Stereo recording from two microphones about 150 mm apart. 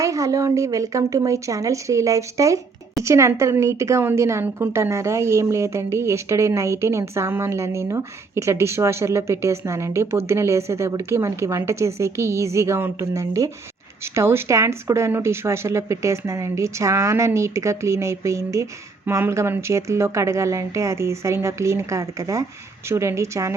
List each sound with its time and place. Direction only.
0.0 s a woman's voice: 20° right (ahead or behind)